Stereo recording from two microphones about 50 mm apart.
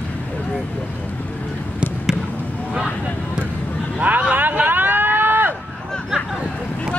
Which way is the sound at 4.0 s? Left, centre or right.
Right.